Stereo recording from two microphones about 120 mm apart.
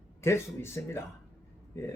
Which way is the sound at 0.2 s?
20° left (ahead or behind).